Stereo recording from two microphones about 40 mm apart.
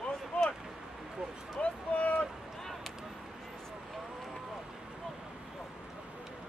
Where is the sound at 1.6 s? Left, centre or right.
Left.